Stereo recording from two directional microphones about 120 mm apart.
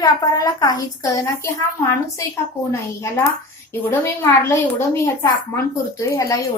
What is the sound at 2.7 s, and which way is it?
A woman's voice, 20° left (ahead or behind).